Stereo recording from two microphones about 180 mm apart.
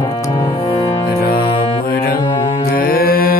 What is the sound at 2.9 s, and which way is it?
Mantra, 55° left (ahead or behind).